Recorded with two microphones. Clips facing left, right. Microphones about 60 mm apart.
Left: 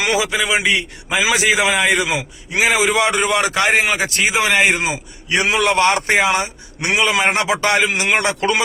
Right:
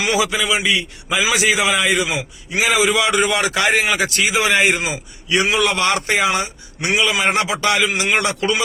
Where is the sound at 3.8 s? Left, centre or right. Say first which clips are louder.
Even; centre.